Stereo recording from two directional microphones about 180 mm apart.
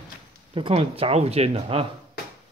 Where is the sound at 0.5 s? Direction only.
30° right (ahead or behind).